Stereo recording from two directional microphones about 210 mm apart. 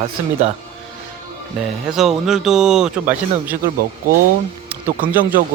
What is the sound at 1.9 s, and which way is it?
Speech, centre (ahead or behind).